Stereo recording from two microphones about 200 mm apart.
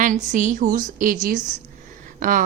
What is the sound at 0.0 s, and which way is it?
A woman's voice, 40° right (ahead or behind).